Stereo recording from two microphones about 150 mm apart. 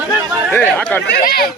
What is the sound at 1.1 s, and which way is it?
Speech, 90° left.